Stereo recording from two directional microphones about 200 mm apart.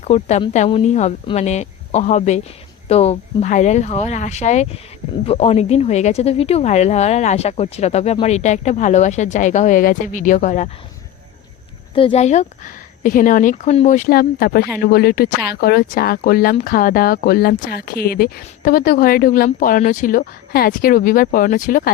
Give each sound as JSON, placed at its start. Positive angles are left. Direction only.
{"t": 0.0, "sound": "a woman's voice", "side_deg": 35}
{"t": 11.9, "sound": "a woman's voice", "side_deg": 30}